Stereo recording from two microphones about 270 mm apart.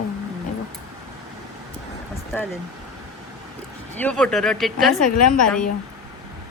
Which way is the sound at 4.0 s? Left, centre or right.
Centre.